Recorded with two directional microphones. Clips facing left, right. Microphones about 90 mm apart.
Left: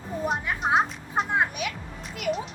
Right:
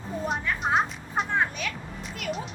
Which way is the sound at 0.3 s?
15° left (ahead or behind).